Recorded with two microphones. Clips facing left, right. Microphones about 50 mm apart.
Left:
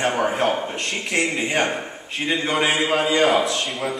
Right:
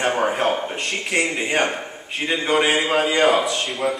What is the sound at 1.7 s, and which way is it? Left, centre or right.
Speech, centre.